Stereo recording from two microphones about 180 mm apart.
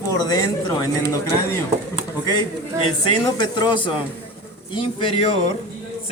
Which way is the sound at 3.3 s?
25° left (ahead or behind).